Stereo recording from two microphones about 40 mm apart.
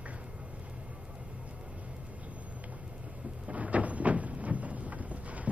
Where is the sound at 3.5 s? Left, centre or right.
Right.